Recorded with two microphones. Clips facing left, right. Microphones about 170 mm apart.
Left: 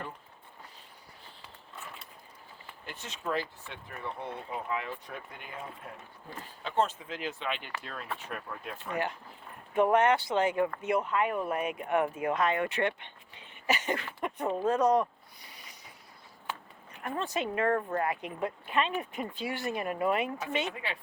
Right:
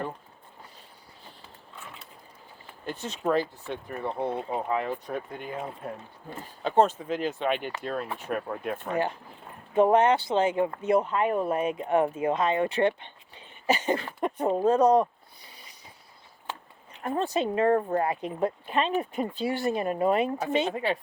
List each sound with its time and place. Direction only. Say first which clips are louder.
2.8 s speech: right 9 dB; 35° right (ahead or behind); by 8.9 s 50° right (ahead or behind)
8.9 s speech: right 3 dB; 30° right (ahead or behind)
15.4 s a sound: even; 30° right (ahead or behind)
16.5 s speech: right 1 dB; 30° right (ahead or behind)